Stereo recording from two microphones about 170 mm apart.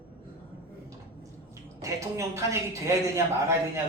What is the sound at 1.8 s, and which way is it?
Speech, 20° right (ahead or behind).